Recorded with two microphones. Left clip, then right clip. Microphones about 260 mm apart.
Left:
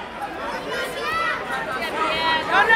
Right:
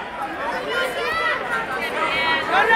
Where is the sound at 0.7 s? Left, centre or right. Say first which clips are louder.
Right 1 dB; right.